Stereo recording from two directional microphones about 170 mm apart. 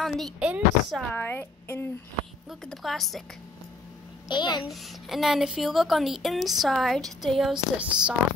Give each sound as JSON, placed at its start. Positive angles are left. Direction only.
{"t": 0.0, "sound": "a woman's voice", "side_deg": -5}
{"t": 1.1, "sound": "a woman's voice", "side_deg": 10}
{"t": 2.6, "sound": "a woman's voice", "side_deg": 0}
{"t": 4.3, "sound": "a child's voice", "side_deg": 25}
{"t": 4.6, "sound": "a woman's voice", "side_deg": 0}